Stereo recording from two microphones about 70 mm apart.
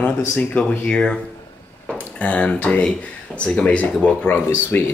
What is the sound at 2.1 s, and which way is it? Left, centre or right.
Speech, centre.